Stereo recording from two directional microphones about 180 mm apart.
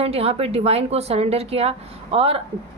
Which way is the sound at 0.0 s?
35° right (ahead or behind).